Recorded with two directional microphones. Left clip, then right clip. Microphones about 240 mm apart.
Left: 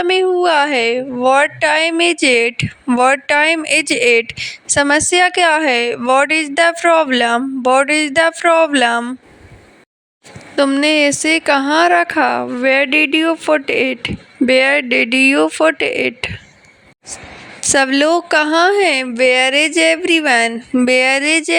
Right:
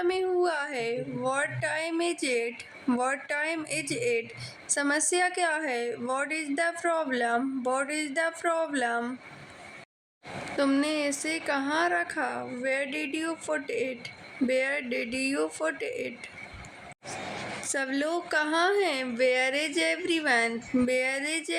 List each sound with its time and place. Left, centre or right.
0.0 s speech: left
10.6 s speech: left
17.6 s speech: left